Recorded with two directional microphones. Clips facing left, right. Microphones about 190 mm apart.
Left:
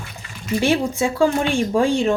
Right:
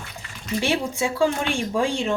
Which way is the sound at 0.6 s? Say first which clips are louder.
Left 5 dB; 45° left (ahead or behind).